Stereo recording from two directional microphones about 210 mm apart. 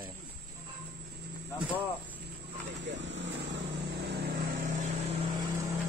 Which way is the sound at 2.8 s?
60° right (ahead or behind).